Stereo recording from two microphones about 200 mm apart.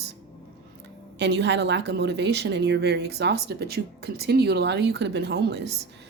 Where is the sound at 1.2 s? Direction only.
60° right (ahead or behind).